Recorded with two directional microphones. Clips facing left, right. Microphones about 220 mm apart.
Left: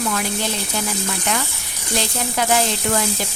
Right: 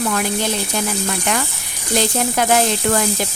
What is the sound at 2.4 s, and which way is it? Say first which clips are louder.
Speech: right 2 dB; 50° right (ahead or behind).